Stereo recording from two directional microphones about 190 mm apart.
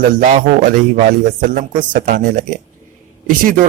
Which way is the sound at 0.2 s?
40° right (ahead or behind).